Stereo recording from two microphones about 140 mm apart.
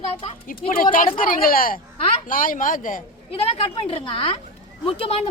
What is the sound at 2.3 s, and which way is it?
Speech, 80° left.